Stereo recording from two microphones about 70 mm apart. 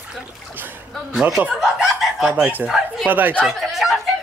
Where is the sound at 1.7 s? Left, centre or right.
Centre.